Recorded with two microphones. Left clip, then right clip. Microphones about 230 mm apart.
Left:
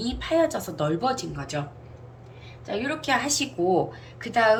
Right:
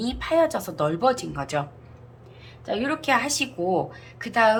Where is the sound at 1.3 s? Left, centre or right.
Centre.